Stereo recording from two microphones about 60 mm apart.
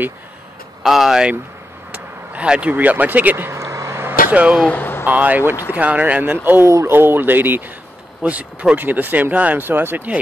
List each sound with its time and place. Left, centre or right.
0.8 s speech: centre
1.9 s vehicle: centre
2.7 s speech: right
3.5 s vehicle: right
4.3 s speech: right
4.7 s a sound: left
5.0 s speech: right